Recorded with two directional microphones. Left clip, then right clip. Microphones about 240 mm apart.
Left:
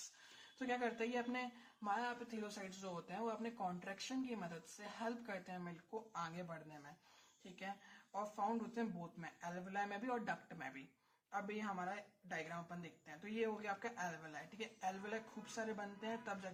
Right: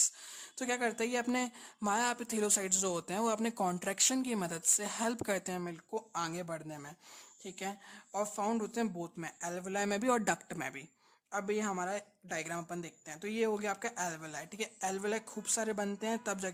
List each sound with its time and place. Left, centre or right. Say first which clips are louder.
0.6 s speech: right 8 dB; right